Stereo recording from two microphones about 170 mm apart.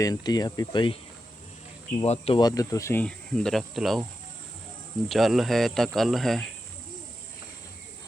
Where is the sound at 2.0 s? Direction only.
35° left (ahead or behind).